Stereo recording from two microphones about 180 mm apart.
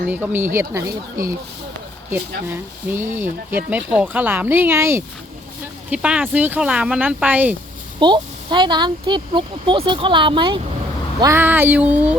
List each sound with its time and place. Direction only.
0.1 s speech: 10° right (ahead or behind)
2.5 s speech: 15° right (ahead or behind)
7.9 s speech: 25° right (ahead or behind)
11.2 s speech: 15° right (ahead or behind)